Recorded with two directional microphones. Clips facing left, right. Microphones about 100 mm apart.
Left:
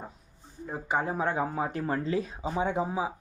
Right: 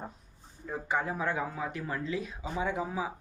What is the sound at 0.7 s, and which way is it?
Speech, 25° left (ahead or behind).